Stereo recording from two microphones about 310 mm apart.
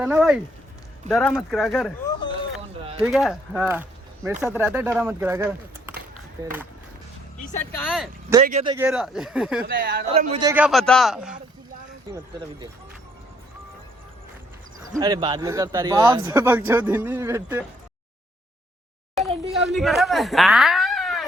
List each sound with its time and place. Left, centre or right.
0.0 s speech: centre
7.9 s speech: centre
8.4 s speech: centre
8.7 s speech: centre
9.6 s speech: right
10.1 s speech: centre
10.5 s speech: centre
14.9 s speech: centre
19.6 s speech: centre